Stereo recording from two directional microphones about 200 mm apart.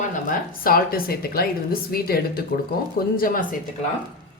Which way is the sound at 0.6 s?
45° left (ahead or behind).